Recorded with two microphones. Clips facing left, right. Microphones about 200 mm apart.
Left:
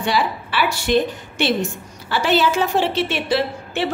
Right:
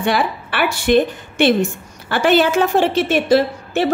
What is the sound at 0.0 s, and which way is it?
A woman's voice, 55° right (ahead or behind).